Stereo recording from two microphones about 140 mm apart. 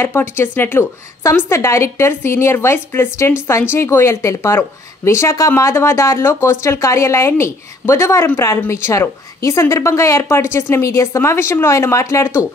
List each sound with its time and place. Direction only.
0.0 s a woman's voice: 15° left (ahead or behind)